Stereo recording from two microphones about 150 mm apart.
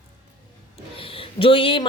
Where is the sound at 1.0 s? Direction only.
35° left (ahead or behind).